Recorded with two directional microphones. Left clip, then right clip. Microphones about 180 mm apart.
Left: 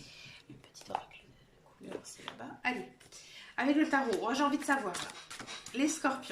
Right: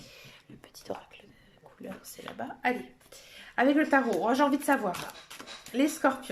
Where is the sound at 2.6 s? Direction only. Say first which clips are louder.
Right 5 dB; 45° right (ahead or behind).